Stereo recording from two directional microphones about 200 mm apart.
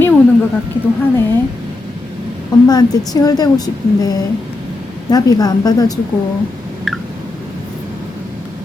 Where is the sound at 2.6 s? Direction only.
20° left (ahead or behind).